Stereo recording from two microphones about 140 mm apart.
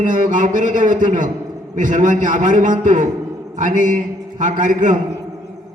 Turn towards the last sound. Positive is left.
turn(degrees=-65)  # may be behind; listen again after turning